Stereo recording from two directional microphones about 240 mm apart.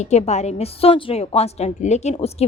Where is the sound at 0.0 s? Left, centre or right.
Left.